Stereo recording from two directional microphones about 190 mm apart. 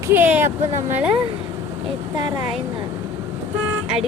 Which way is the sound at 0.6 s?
35° right (ahead or behind).